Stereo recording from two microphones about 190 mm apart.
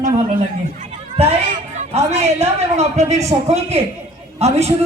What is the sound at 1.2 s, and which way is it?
A man's voice, 35° right (ahead or behind).